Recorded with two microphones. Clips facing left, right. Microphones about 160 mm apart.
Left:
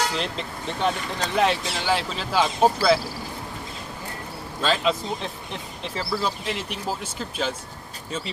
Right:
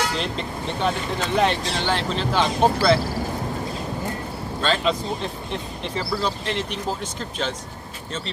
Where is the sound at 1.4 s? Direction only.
5° left (ahead or behind).